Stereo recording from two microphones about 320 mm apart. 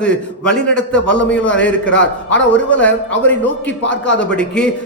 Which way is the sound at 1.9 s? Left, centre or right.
Left.